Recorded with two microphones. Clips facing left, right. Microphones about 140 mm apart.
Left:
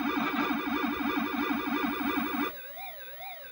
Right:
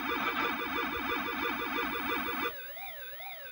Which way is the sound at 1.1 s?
35° left (ahead or behind).